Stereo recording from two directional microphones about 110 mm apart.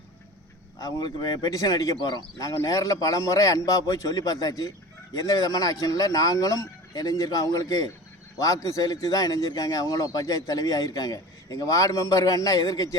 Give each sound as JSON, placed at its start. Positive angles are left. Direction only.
{"t": 0.8, "sound": "a man's voice", "side_deg": 35}